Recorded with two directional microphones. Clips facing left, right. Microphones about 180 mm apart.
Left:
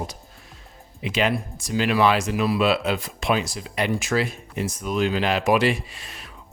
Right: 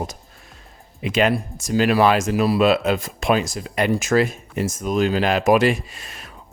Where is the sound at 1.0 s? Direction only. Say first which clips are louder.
Right 4 dB; 50° right (ahead or behind).